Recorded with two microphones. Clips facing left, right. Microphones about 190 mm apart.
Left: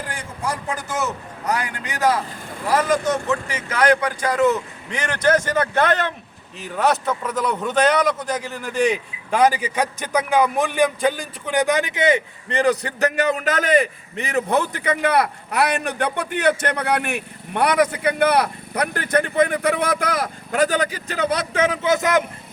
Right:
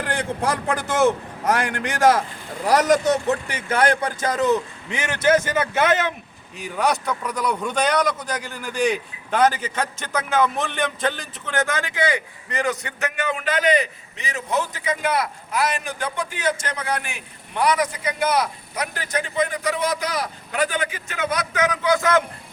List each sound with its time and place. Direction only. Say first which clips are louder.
0.0 s a man's voice: right 5 dB; 75° right (ahead or behind)
2.6 s speech: right 2 dB; 70° right (ahead or behind)
3.7 s speech: left 2 dB; 30° right (ahead or behind)
4.9 s a man's voice: even; 10° right (ahead or behind); by 22.2 s 20° left (ahead or behind)